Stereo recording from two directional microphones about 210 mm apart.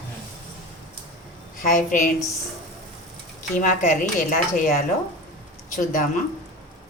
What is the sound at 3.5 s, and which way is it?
Speech, 40° left (ahead or behind).